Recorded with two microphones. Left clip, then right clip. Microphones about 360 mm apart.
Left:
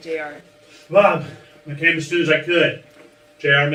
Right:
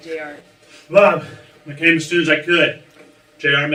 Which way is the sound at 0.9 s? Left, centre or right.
Right.